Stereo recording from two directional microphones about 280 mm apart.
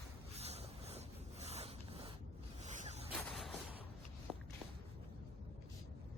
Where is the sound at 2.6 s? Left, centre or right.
Right.